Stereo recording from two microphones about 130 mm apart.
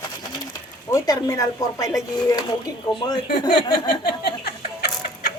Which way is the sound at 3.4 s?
35° left (ahead or behind).